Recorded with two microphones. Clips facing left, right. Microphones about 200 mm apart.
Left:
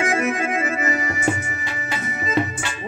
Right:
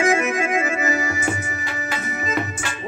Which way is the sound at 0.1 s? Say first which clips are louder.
Right 1 dB; 35° left (ahead or behind).